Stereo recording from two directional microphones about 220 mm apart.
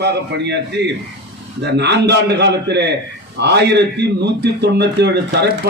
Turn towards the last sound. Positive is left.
turn(degrees=-50)  # may be behind; listen again after turning